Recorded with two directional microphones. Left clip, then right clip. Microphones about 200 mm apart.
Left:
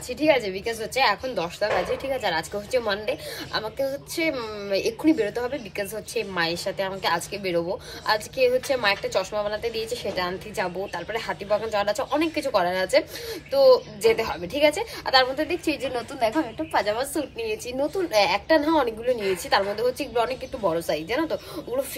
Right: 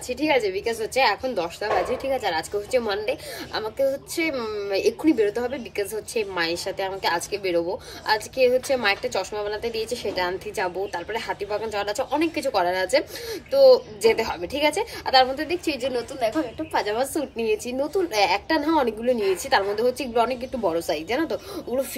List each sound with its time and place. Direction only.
0.1 s a woman's voice: 10° right (ahead or behind)
10.1 s a woman's voice: 10° right (ahead or behind)
16.7 s a woman's voice: 10° right (ahead or behind)